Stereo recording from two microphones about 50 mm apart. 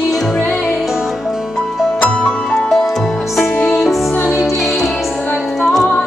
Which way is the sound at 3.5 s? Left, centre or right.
Centre.